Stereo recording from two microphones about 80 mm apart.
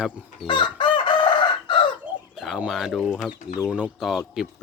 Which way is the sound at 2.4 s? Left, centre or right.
Centre.